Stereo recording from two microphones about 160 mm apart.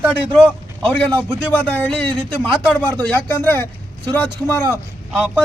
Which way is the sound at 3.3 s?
15° left (ahead or behind).